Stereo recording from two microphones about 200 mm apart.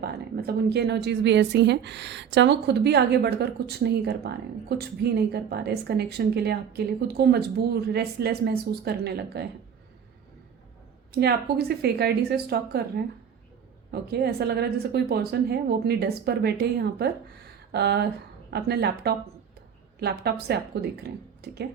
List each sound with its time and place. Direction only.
0.0 s a woman's voice: 55° right (ahead or behind)
11.1 s a woman's voice: 50° right (ahead or behind)
13.9 s a woman's voice: 50° right (ahead or behind)